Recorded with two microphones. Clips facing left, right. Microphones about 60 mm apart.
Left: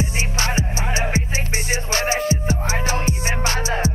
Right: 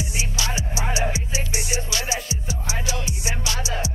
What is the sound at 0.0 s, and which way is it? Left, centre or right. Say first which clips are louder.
Music: left 5 dB; left.